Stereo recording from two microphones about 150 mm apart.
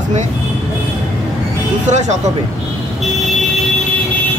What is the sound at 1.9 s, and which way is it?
Speech, 50° right (ahead or behind).